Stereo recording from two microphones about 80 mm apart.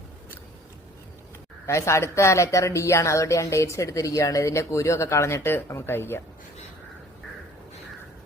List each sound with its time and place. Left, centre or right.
1.6 s speech: left